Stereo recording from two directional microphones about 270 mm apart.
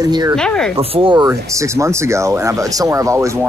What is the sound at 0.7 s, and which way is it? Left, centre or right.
Speech, centre.